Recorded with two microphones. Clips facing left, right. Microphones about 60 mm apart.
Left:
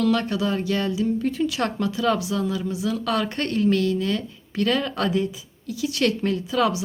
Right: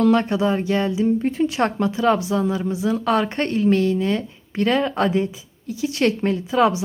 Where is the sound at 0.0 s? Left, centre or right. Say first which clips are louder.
Right 5 dB; right.